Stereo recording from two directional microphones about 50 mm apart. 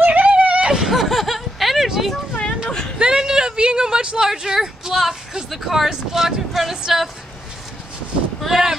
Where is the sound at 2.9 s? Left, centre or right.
Centre.